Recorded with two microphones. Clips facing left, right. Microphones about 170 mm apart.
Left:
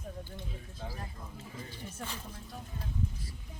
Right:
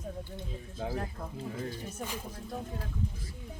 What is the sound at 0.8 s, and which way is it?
Speech, 60° right (ahead or behind).